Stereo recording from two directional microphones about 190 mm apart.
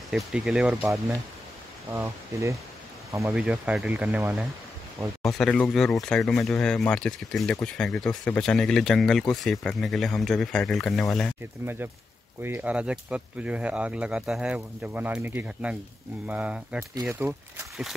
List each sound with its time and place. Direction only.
0.1 s speech: centre (ahead or behind)
1.9 s speech: 15° right (ahead or behind); by 11.1 s centre (ahead or behind)
11.6 s speech: 10° right (ahead or behind)
16.9 s speech: 15° right (ahead or behind)